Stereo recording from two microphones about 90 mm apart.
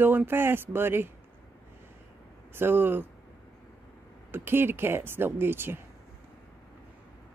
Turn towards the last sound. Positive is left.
turn(degrees=-25)  # may be behind; listen again after turning